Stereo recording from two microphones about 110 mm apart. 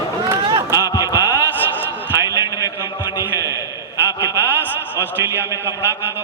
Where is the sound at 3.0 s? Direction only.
40° left (ahead or behind).